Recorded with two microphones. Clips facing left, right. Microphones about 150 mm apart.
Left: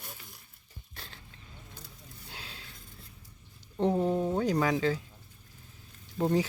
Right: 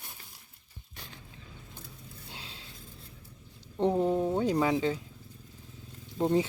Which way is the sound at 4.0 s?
10° right (ahead or behind).